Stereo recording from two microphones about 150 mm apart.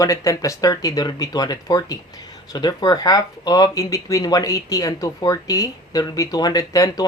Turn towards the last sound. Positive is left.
turn(degrees=25)  # may be behind; listen again after turning